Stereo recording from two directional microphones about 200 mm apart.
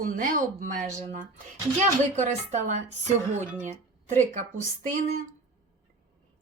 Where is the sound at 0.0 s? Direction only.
45° right (ahead or behind).